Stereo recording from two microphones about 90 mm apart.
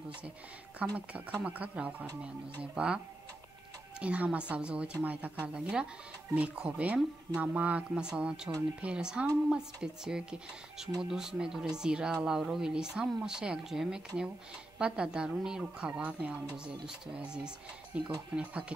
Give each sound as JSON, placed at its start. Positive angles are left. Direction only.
{"t": 0.9, "sound": "speech", "side_deg": -15}
{"t": 4.0, "sound": "speech", "side_deg": -15}